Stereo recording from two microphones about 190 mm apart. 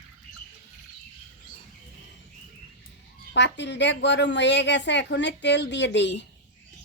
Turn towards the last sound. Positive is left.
turn(degrees=65)  # may be behind; listen again after turning